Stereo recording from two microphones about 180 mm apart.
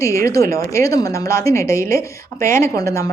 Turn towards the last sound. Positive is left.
turn(degrees=20)  # may be behind; listen again after turning